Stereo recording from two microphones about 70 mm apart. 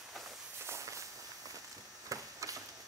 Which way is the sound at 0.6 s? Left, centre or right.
Right.